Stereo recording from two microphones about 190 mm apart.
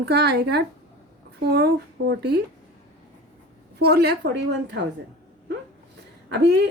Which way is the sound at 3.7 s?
60° right (ahead or behind).